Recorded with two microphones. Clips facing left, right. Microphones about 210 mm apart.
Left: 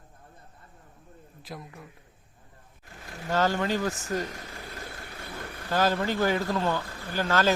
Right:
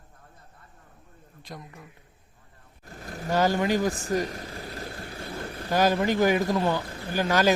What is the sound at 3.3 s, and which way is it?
Speech, 15° right (ahead or behind).